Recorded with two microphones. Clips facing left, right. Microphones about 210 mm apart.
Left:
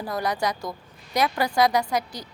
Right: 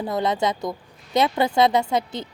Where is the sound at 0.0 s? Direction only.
25° right (ahead or behind).